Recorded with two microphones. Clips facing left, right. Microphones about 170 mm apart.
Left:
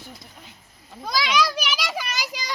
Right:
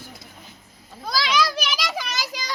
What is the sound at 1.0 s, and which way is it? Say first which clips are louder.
Speech: even; 15° left (ahead or behind).